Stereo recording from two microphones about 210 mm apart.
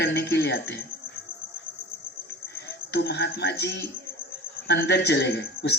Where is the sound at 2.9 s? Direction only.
50° left (ahead or behind).